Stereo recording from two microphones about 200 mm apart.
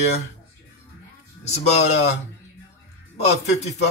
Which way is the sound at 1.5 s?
35° left (ahead or behind).